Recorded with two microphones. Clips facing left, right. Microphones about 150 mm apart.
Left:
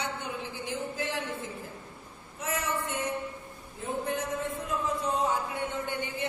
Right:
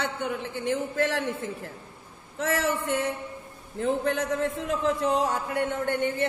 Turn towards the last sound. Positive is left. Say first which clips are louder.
# right 7 dB
turn(degrees=-65)  # may be behind; listen again after turning